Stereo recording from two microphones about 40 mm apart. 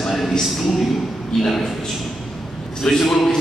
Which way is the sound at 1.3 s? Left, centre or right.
Centre.